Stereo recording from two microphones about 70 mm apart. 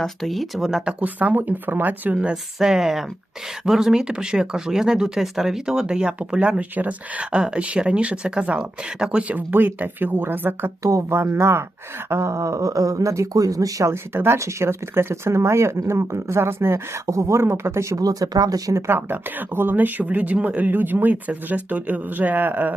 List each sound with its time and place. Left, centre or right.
0.0 s speech: centre; by 2.1 s right
2.1 s speech: centre; by 10.7 s right
10.8 s speech: right
13.9 s speech: right
18.9 s speech: right